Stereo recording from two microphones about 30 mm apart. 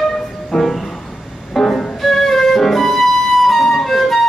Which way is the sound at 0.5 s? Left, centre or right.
Centre.